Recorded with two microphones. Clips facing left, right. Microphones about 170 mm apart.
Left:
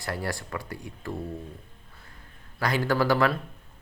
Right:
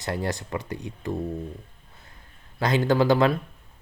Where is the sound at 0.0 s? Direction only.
20° right (ahead or behind).